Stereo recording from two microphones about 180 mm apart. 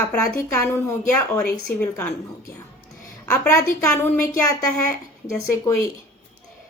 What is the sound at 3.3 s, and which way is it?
A woman's voice, 15° left (ahead or behind).